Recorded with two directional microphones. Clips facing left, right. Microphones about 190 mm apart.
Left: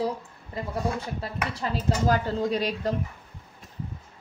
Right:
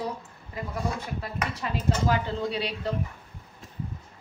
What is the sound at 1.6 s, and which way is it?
A woman's voice, 45° left (ahead or behind).